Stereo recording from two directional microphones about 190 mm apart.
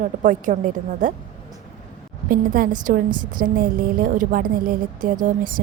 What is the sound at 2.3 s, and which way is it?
A woman's voice, 45° right (ahead or behind).